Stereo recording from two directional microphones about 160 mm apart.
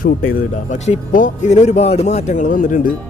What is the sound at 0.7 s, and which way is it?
A man's voice, 45° left (ahead or behind).